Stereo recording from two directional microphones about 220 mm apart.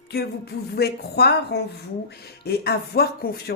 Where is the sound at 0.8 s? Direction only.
45° left (ahead or behind).